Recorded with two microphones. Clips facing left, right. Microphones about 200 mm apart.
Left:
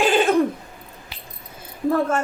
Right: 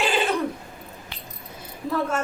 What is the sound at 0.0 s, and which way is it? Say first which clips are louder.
Throat clearing: left 6 dB; 45° left (ahead or behind).